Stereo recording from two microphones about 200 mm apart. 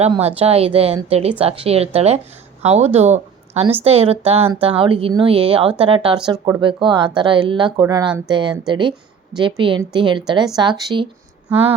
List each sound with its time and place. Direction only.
0.1 s a woman's voice: 30° right (ahead or behind)